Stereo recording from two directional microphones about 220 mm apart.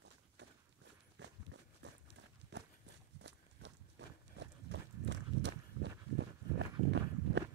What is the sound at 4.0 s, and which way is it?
Horse, 55° right (ahead or behind).